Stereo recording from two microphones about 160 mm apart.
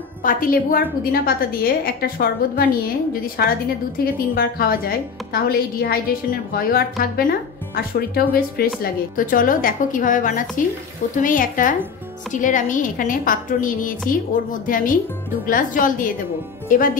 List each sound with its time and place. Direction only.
0.2 s a woman's voice: 60° left (ahead or behind)
9.1 s a woman's voice: 60° left (ahead or behind)